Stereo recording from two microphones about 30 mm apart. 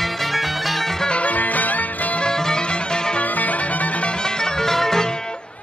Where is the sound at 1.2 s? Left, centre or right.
Left.